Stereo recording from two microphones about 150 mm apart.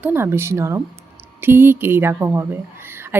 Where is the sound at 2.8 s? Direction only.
15° right (ahead or behind).